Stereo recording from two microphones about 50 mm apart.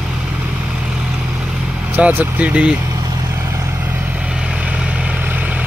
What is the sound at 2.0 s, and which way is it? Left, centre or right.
Speech, right.